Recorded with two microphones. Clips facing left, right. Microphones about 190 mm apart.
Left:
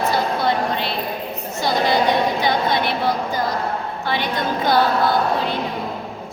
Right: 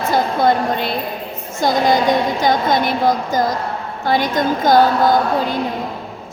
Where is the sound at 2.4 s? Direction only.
45° right (ahead or behind).